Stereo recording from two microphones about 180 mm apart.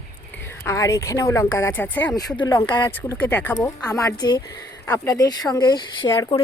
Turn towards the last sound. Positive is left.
turn(degrees=20)  # may be behind; listen again after turning